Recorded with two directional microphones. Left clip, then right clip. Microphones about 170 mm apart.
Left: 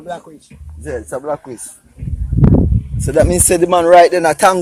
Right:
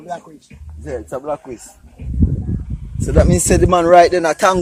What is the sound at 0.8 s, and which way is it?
Speech, 25° left (ahead or behind).